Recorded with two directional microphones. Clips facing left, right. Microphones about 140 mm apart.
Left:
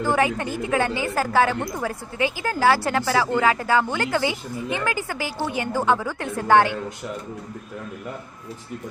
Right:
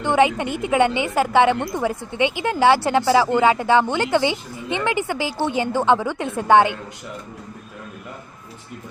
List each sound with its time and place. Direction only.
0.0 s a woman's voice: 25° right (ahead or behind)